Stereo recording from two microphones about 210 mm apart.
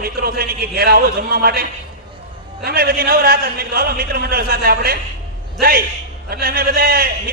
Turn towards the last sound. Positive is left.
turn(degrees=-45)  # may be behind; listen again after turning